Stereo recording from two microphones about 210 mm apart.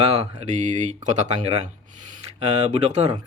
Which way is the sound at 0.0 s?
25° right (ahead or behind).